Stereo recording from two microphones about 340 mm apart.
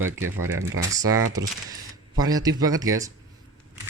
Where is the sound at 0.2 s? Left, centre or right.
Right.